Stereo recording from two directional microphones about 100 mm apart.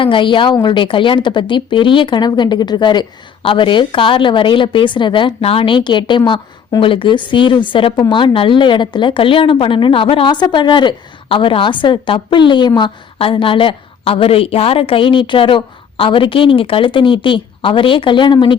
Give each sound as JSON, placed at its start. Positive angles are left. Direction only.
{"t": 0.0, "sound": "a woman's voice", "side_deg": 55}
{"t": 10.4, "sound": "speech", "side_deg": 50}
{"t": 13.1, "sound": "a woman's voice", "side_deg": 65}